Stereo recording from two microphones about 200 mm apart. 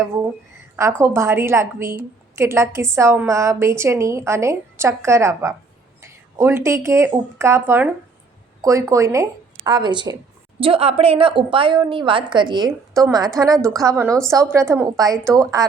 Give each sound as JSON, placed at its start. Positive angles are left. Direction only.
{"t": 0.8, "sound": "a woman's voice", "side_deg": -15}